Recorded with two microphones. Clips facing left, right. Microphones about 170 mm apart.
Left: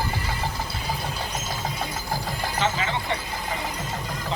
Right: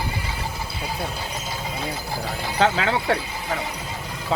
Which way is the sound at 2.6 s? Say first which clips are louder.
Right 7 dB; 90° right.